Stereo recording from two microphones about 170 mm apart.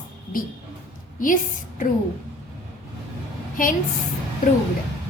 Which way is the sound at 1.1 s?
50° left (ahead or behind).